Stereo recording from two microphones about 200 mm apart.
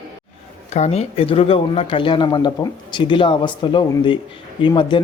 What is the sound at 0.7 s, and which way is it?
Speech, 35° left (ahead or behind).